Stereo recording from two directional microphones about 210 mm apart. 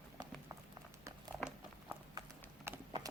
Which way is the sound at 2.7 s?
10° right (ahead or behind).